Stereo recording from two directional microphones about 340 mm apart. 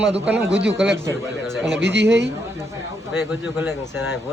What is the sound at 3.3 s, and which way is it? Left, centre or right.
Speech, centre.